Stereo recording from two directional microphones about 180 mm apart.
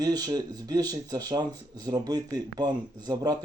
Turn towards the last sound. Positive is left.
turn(degrees=-20)  # may be behind; listen again after turning